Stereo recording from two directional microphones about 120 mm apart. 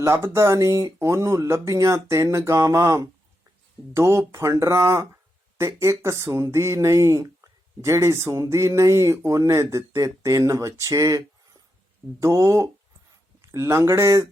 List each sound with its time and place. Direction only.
0.0 s speech: 25° right (ahead or behind)